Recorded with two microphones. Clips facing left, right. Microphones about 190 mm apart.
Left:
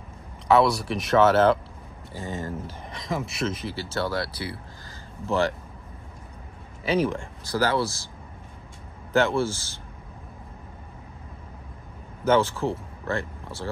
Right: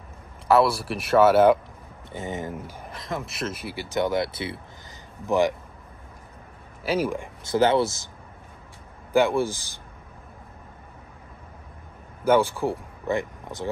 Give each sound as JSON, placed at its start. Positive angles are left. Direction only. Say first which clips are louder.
{"t": 0.5, "sound": "speech", "louder": "even", "side_deg": -5}
{"t": 6.8, "sound": "speech", "louder": "left 1 dB", "side_deg": -5}
{"t": 7.4, "sound": "speech", "louder": "right 4 dB", "side_deg": -25}
{"t": 9.1, "sound": "speech", "louder": "right 1 dB", "side_deg": -15}
{"t": 12.3, "sound": "speech", "louder": "right 1 dB", "side_deg": -15}